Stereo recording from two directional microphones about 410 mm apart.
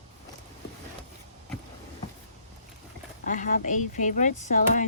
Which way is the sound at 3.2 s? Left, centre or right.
Centre.